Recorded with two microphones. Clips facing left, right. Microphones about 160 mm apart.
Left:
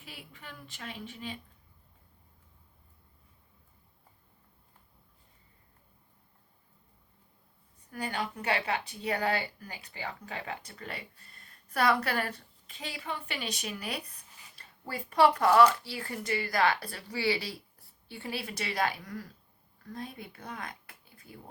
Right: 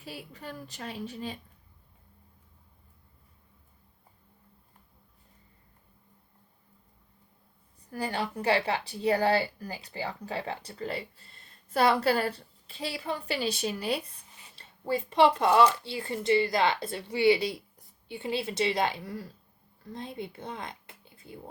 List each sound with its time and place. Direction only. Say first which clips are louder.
0.0 s a woman's voice: right 7 dB; 40° right (ahead or behind)
7.9 s a woman's voice: right 3 dB; 30° right (ahead or behind)